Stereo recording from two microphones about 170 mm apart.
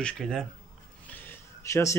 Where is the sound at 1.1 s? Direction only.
15° left (ahead or behind).